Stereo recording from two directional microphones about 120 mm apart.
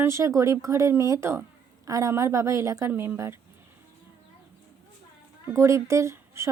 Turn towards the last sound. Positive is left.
turn(degrees=-25)  # may be behind; listen again after turning